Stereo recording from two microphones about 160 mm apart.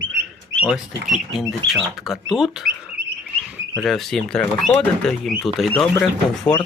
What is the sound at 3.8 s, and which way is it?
Speech, centre (ahead or behind).